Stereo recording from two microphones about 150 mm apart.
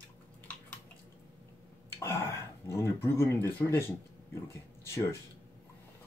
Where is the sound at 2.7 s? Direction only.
20° left (ahead or behind).